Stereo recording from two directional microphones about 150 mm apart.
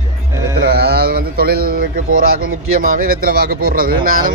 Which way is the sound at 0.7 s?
90° right.